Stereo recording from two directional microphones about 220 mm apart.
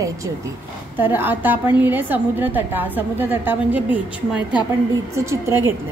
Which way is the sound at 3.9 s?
20° left (ahead or behind).